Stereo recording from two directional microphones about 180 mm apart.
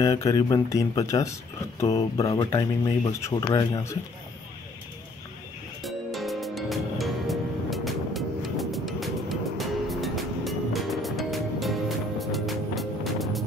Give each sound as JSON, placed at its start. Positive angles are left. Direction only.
{"t": 0.0, "sound": "speech", "side_deg": 20}
{"t": 2.3, "sound": "speech", "side_deg": 20}
{"t": 5.8, "sound": "music", "side_deg": 0}